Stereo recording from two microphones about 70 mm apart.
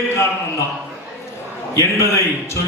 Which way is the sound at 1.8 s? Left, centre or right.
Left.